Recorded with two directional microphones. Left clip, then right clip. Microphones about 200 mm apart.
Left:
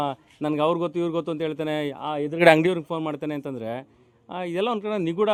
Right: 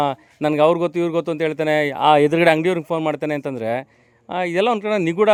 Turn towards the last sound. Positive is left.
turn(degrees=-20)  # may be behind; listen again after turning